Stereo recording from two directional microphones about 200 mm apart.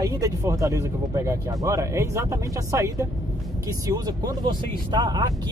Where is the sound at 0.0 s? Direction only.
20° right (ahead or behind).